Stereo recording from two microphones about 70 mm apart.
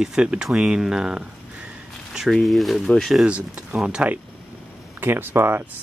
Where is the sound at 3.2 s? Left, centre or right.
Centre.